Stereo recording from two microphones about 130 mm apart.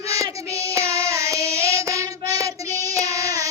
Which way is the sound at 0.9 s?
20° right (ahead or behind).